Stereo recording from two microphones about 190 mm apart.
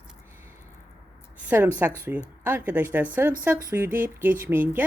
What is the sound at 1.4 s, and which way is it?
Speech, 10° right (ahead or behind).